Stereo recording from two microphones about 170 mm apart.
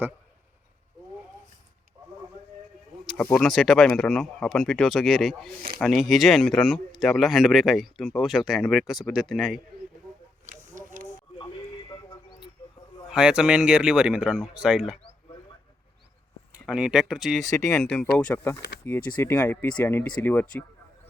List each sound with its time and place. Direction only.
3.4 s a man's voice: centre (ahead or behind)
10.4 s a sound: 50° right (ahead or behind)
11.3 s sheep: 25° left (ahead or behind)
13.1 s a man's voice: 5° right (ahead or behind)
16.5 s speech: 5° right (ahead or behind)
17.4 s speech: 20° left (ahead or behind)
17.8 s a man's voice: 5° left (ahead or behind)